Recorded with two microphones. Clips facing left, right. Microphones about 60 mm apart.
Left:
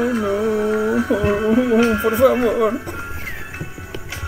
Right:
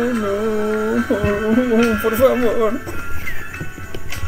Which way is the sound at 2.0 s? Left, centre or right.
Centre.